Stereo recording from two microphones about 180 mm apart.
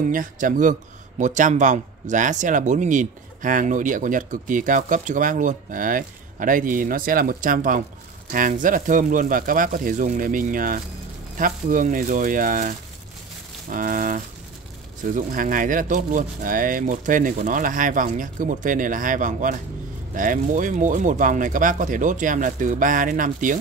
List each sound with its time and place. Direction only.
0.1 s speech: 50° right (ahead or behind)